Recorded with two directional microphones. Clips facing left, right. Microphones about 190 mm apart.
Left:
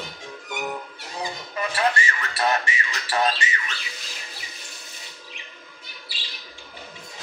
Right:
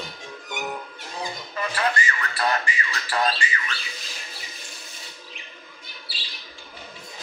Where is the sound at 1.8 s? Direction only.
25° left (ahead or behind).